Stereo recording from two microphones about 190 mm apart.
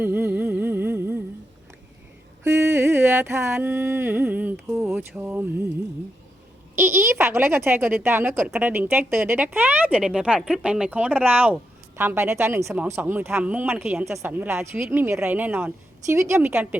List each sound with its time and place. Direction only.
0.0 s humming: 10° right (ahead or behind)
2.4 s mantra: 15° right (ahead or behind)
4.7 s speech: 10° right (ahead or behind)
6.7 s speech: 10° right (ahead or behind)